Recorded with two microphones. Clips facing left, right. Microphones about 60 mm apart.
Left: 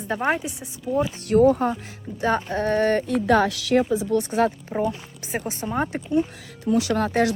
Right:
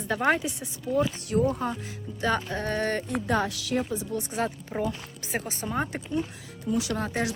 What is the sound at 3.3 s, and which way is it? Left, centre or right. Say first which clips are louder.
A woman's voice: left 8 dB; left.